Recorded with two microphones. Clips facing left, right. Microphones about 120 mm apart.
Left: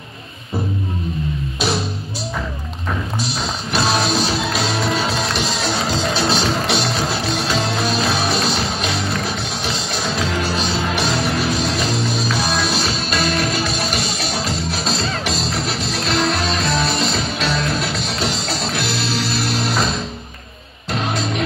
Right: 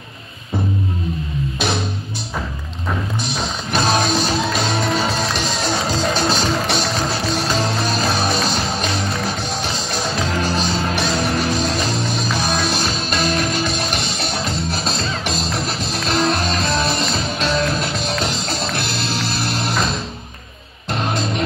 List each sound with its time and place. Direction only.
3.7 s music: 50° right (ahead or behind)